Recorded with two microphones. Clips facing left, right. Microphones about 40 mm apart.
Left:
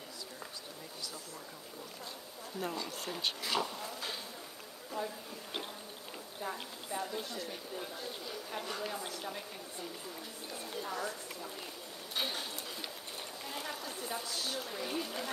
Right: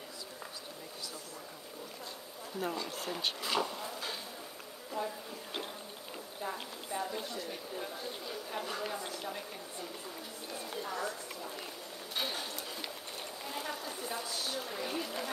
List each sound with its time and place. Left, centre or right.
2.6 s speech: centre
3.5 s insect: centre
4.9 s speech: centre
10.5 s a sound: centre
12.2 s speech: centre
13.5 s a sound: centre
14.1 s speech: centre
14.5 s speech: centre